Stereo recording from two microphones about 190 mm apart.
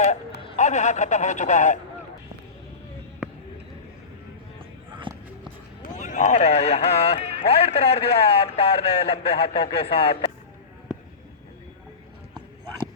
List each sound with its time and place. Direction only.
0.5 s speech: 40° left (ahead or behind)
5.1 s a sound: 25° right (ahead or behind)
5.8 s speech: 40° left (ahead or behind)